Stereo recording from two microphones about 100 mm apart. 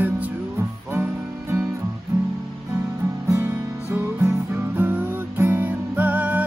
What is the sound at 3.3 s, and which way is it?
Music, 25° right (ahead or behind).